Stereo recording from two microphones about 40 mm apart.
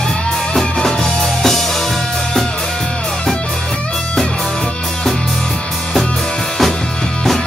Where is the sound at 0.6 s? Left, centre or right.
Centre.